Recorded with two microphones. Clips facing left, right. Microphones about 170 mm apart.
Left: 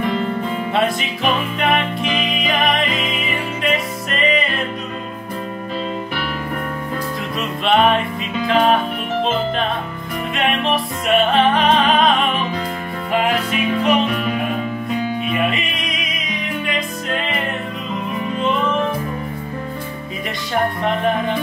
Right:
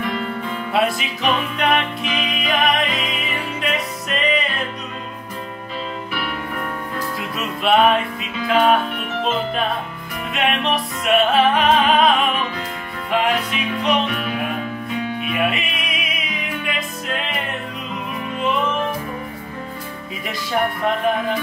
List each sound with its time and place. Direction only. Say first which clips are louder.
0.7 s music: right 1 dB; centre (ahead or behind)
2.0 s music: left 3 dB; 45° left (ahead or behind)
2.3 s music: right 2 dB; centre (ahead or behind)
7.3 s music: even; centre (ahead or behind)
10.3 s music: left 1 dB; centre (ahead or behind)
14.0 s music: left 4 dB; 40° left (ahead or behind)
15.3 s music: left 1 dB; 5° right (ahead or behind)